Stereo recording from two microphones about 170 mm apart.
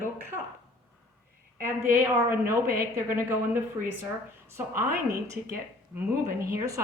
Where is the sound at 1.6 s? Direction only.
15° right (ahead or behind).